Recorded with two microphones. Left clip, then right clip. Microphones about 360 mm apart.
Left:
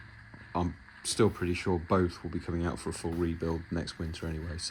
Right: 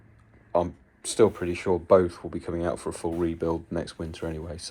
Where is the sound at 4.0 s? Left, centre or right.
Right.